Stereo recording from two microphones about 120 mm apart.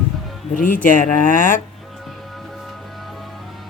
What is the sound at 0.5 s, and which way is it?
Speech, 90° left.